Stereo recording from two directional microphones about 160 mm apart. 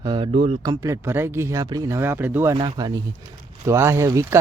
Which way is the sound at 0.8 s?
15° right (ahead or behind).